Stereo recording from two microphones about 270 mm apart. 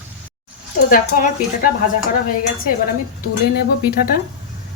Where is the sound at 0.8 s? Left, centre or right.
Left.